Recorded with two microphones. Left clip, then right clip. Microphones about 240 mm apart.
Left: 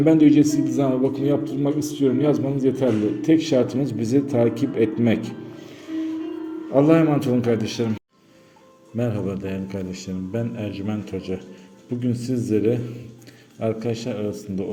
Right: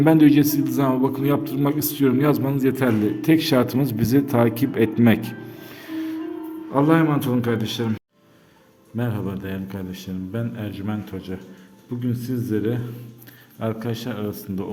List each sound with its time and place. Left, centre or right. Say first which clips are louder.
0.0 s a man's voice: even; right
5.9 s music: left 1 dB; right
6.7 s a man's voice: left 2 dB; centre